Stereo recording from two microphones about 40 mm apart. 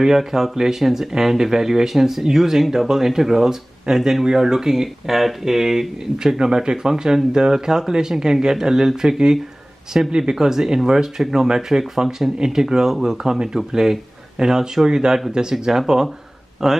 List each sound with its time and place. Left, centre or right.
0.0 s speech: centre
9.9 s speech: right
10.3 s speech: centre